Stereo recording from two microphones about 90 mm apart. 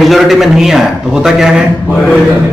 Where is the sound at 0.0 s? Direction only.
Centre (ahead or behind).